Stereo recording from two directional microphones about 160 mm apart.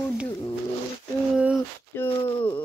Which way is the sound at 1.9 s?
15° left (ahead or behind).